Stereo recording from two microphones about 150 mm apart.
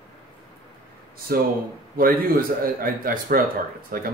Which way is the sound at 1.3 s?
90° right.